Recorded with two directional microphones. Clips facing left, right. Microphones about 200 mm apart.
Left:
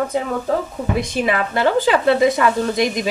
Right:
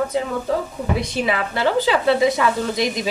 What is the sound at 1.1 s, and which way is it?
A woman's voice, 50° left (ahead or behind).